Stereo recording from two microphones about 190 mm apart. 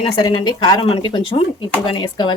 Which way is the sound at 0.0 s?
25° left (ahead or behind).